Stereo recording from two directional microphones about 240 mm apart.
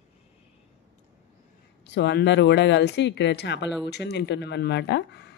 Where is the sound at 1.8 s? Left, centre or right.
Left.